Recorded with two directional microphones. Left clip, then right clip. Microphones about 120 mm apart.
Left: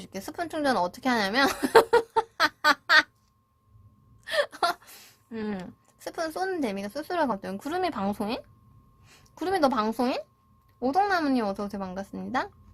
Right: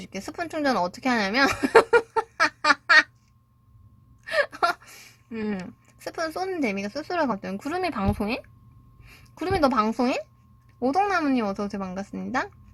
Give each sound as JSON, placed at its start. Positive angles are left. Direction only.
{"t": 0.0, "sound": "speech", "side_deg": 0}
{"t": 1.6, "sound": "a sound", "side_deg": 0}
{"t": 4.2, "sound": "gasp", "side_deg": 0}
{"t": 6.6, "sound": "speech", "side_deg": -5}
{"t": 7.8, "sound": "speech", "side_deg": -15}
{"t": 9.0, "sound": "a sound", "side_deg": 0}
{"t": 9.9, "sound": "speech", "side_deg": -15}
{"t": 11.0, "sound": "speech", "side_deg": 10}